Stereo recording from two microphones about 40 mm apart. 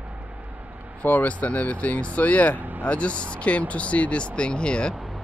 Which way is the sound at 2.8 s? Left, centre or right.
Left.